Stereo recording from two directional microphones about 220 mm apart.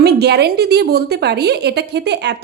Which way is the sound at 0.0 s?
45° right (ahead or behind).